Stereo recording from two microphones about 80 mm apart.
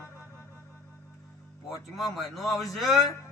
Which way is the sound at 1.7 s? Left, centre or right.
Centre.